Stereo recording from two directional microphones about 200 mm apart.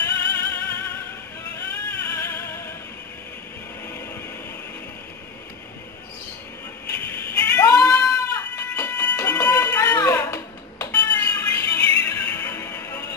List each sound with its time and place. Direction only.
0.3 s music: 15° left (ahead or behind)
7.2 s a sound: 15° left (ahead or behind)
12.0 s music: 10° left (ahead or behind)